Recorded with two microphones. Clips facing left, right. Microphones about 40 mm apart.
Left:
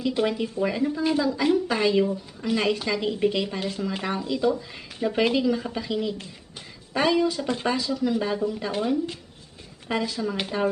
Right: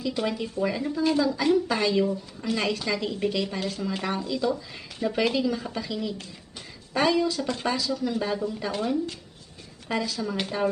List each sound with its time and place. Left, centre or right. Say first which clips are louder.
0.0 s speech: left 4 dB; left
6.9 s speech: left 1 dB; centre